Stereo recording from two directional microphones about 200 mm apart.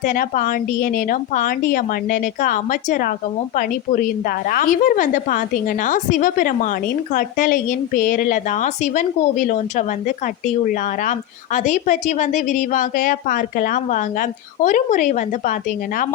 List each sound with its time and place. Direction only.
0.0 s a woman's voice: 40° left (ahead or behind)